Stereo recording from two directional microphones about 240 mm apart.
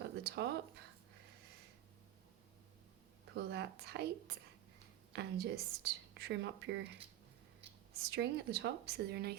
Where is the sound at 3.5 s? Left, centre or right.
Right.